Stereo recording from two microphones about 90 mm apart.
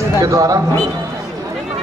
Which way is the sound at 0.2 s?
40° right (ahead or behind).